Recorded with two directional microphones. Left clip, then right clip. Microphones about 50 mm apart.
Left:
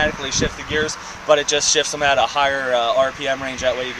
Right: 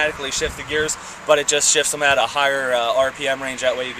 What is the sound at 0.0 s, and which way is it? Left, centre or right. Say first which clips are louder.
Speech: left 1 dB; right.